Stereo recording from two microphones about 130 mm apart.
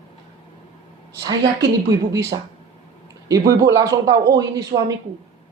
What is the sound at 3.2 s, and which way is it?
Speech, 25° right (ahead or behind).